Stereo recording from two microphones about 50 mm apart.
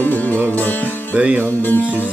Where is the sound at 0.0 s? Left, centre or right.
Left.